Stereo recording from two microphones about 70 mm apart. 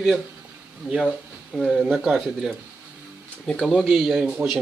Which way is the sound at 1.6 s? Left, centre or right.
Centre.